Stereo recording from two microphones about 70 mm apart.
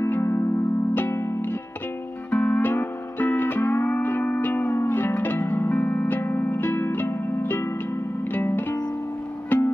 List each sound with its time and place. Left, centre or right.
0.0 s music: left